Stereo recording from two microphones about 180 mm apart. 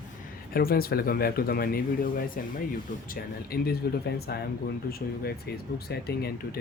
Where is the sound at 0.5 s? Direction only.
55° left (ahead or behind).